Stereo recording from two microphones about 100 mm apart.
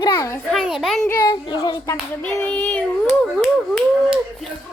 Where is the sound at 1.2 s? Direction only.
45° left (ahead or behind).